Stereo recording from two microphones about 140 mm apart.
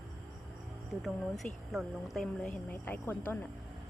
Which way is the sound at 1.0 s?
Centre (ahead or behind).